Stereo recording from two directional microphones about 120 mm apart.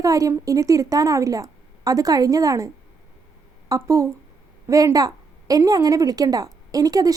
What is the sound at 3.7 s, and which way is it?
A woman's voice, 25° right (ahead or behind).